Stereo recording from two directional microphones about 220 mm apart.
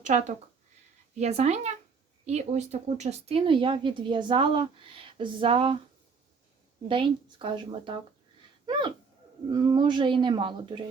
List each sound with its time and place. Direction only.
0.0 s speech: 30° right (ahead or behind)
6.8 s speech: 25° right (ahead or behind)
8.6 s a sound: 20° right (ahead or behind)
9.5 s speech: 20° right (ahead or behind)